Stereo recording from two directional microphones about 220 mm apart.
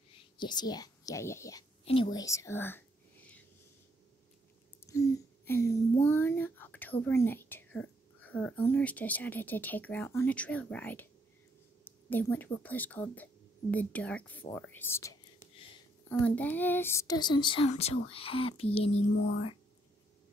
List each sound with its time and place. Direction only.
0.1 s speech: 20° left (ahead or behind)
2.1 s whispering: 15° left (ahead or behind)
4.8 s speech: 10° left (ahead or behind)
12.1 s speech: 10° left (ahead or behind); by 18.9 s 25° left (ahead or behind)